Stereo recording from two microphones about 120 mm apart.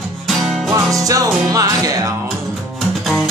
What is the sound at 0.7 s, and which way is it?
Music, 25° right (ahead or behind).